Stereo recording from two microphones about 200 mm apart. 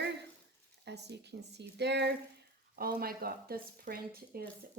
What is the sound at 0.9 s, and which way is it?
Speech, 55° right (ahead or behind).